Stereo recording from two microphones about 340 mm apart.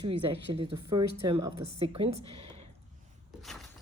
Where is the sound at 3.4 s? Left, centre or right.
Centre.